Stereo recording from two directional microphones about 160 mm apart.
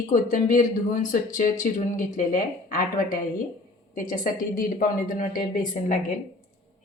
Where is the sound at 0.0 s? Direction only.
55° left (ahead or behind).